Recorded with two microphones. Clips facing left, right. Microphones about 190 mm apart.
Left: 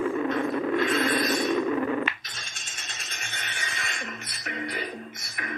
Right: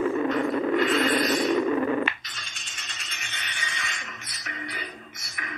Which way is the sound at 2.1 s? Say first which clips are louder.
Right 1 dB; 30° right (ahead or behind).